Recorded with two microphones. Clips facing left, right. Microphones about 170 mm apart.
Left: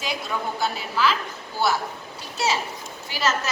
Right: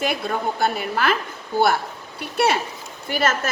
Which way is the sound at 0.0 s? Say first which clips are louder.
Right 5 dB; 55° right (ahead or behind).